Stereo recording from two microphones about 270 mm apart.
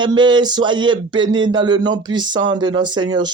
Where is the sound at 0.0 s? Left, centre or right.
Centre.